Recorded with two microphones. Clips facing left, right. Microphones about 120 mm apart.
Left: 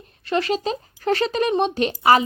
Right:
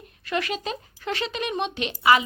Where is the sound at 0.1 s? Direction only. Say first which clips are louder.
Left 6 dB; 30° left (ahead or behind).